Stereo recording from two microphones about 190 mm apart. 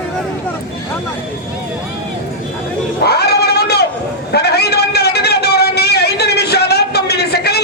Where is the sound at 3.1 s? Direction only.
55° left (ahead or behind).